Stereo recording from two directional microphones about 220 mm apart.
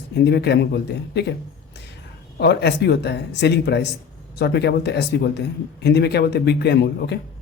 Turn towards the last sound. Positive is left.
turn(degrees=50)  # may be behind; listen again after turning